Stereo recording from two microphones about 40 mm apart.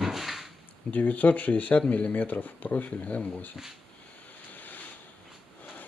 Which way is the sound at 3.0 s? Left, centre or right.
Left.